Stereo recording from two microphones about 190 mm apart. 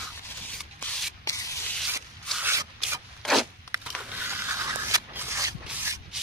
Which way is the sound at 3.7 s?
10° right (ahead or behind).